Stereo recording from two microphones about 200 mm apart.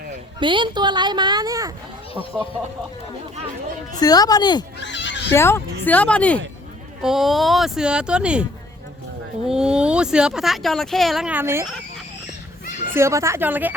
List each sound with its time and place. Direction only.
0.3 s a woman's voice: 25° right (ahead or behind)
4.0 s speech: 20° left (ahead or behind)
4.8 s neigh: 60° left (ahead or behind)
5.3 s speech: 10° left (ahead or behind); by 8.4 s 5° right (ahead or behind)
9.5 s speech: 5° right (ahead or behind)
12.9 s a woman's voice: 15° right (ahead or behind)